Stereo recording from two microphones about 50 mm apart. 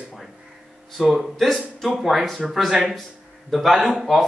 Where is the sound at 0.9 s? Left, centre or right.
Centre.